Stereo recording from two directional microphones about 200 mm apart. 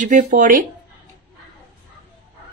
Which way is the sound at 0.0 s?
40° right (ahead or behind).